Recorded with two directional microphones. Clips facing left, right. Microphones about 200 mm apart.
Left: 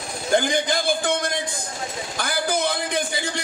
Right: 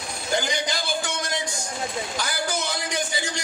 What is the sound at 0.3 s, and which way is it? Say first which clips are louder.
A man's voice: left 6 dB; 55° left (ahead or behind).